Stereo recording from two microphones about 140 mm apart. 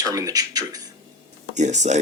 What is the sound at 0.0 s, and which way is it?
Speech, 25° right (ahead or behind).